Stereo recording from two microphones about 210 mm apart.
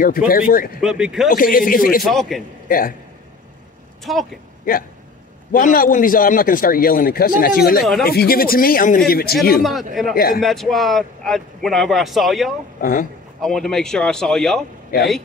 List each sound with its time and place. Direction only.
0.3 s speech: 45° left (ahead or behind)
0.7 s speech: 5° right (ahead or behind)
1.3 s a man's voice: 40° left (ahead or behind)
2.0 s speech: centre (ahead or behind)
4.0 s speech: centre (ahead or behind)
5.5 s a man's voice: 40° left (ahead or behind)
9.6 s speech: centre (ahead or behind)
10.1 s speech: 45° left (ahead or behind)
10.4 s speech: centre (ahead or behind)
12.8 s a man's voice: 40° left (ahead or behind)
13.4 s speech: centre (ahead or behind)
14.9 s speech: 45° left (ahead or behind)